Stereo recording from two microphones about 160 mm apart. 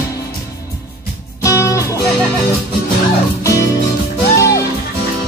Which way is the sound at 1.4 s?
20° left (ahead or behind).